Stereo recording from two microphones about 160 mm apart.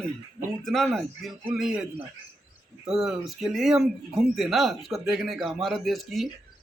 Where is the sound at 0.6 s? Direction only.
Centre (ahead or behind).